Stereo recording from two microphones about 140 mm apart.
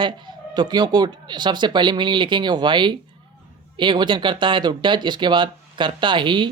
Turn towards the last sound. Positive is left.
turn(degrees=-35)  # may be behind; listen again after turning